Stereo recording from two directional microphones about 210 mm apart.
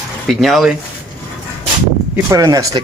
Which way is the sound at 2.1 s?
15° right (ahead or behind).